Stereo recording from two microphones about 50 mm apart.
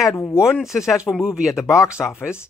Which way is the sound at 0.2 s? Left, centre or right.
Left.